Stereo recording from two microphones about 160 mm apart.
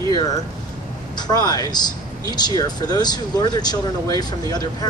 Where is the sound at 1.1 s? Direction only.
25° left (ahead or behind).